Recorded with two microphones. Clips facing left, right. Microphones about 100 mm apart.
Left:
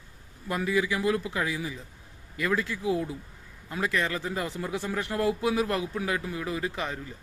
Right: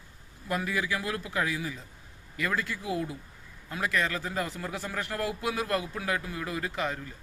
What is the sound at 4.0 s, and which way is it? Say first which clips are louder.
Speech: right 1 dB; 15° left (ahead or behind).